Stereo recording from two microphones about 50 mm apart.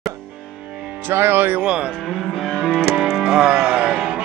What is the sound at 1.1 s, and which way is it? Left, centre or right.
Speech, right.